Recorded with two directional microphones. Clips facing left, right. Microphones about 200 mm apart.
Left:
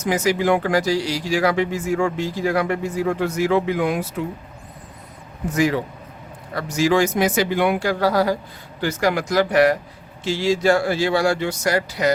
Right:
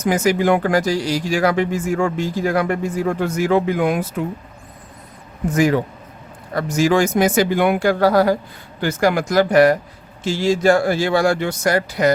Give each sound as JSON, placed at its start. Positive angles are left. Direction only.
{"t": 0.0, "sound": "speech", "side_deg": -50}
{"t": 5.5, "sound": "speech", "side_deg": -50}